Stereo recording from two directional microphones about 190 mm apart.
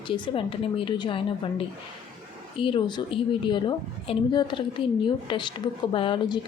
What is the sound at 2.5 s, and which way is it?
A woman's voice, 25° left (ahead or behind).